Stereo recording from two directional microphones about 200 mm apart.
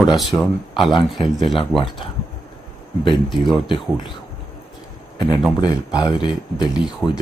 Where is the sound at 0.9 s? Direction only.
25° left (ahead or behind).